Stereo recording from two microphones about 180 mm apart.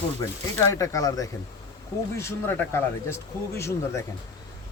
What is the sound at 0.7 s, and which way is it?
A man's voice, 20° left (ahead or behind).